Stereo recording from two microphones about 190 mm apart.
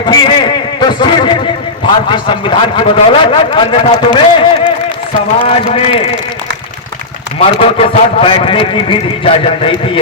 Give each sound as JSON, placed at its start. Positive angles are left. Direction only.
{"t": 0.1, "sound": "a man's voice", "side_deg": 25}
{"t": 7.3, "sound": "a man's voice", "side_deg": 30}